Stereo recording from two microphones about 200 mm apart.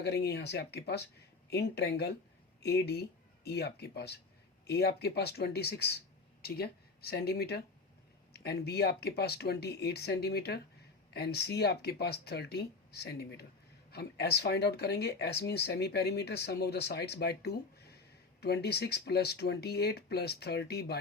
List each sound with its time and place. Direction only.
0.0 s speech: 55° left (ahead or behind)